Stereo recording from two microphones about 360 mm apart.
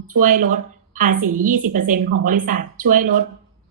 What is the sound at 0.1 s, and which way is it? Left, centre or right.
A woman's voice, right.